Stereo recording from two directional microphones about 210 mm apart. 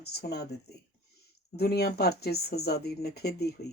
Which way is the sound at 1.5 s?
50° left (ahead or behind).